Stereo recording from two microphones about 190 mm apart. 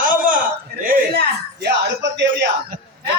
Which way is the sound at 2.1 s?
65° right (ahead or behind).